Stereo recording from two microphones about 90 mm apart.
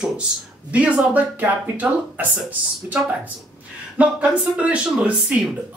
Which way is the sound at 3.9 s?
15° right (ahead or behind).